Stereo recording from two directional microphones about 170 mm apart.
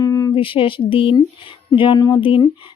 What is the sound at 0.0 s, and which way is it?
Speech, 20° left (ahead or behind).